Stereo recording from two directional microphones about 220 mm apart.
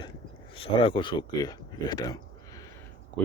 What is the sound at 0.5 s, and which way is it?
Speech, 25° left (ahead or behind).